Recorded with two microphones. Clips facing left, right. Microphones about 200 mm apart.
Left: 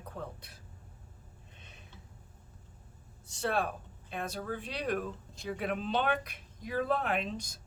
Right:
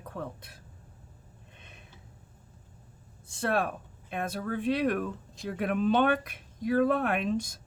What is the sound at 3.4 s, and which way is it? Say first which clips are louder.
Speech: right 3 dB; 55° right (ahead or behind).